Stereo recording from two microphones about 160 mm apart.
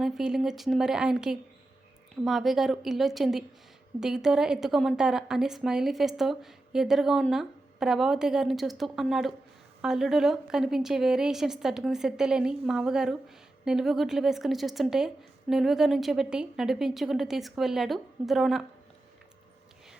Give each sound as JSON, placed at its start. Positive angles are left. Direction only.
{"t": 0.0, "sound": "a woman's voice", "side_deg": 0}